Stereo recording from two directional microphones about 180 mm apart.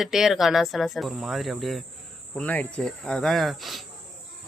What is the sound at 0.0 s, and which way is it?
Speech, centre (ahead or behind).